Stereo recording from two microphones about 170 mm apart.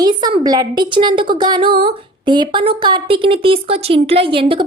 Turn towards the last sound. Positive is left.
turn(degrees=-30)  # may be behind; listen again after turning